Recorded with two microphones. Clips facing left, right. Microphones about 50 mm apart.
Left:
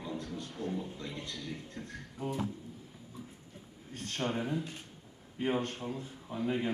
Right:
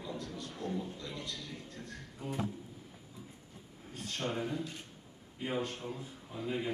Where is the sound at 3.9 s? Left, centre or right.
Left.